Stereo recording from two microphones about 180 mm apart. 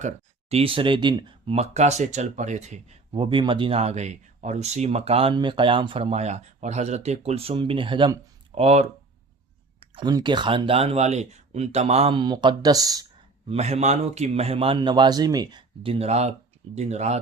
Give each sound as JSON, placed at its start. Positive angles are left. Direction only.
{"t": 0.0, "sound": "speech", "side_deg": -35}
{"t": 13.5, "sound": "speech", "side_deg": -35}